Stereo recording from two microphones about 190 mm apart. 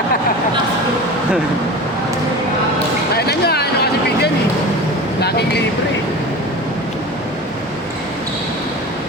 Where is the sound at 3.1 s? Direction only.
55° left (ahead or behind).